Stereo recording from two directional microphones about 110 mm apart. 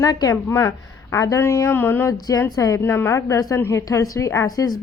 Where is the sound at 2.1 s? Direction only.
35° left (ahead or behind).